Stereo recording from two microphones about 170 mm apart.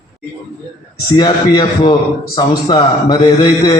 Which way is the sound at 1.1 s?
25° left (ahead or behind).